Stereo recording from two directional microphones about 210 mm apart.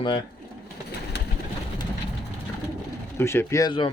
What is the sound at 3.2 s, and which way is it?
Speech, 10° left (ahead or behind).